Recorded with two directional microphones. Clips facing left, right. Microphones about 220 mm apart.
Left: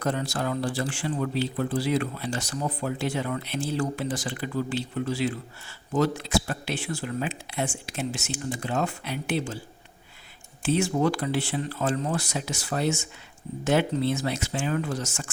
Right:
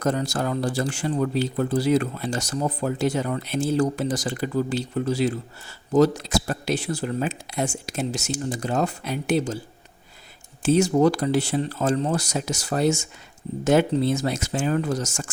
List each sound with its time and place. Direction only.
0.0 s speech: 45° right (ahead or behind)
10.6 s speech: 40° right (ahead or behind)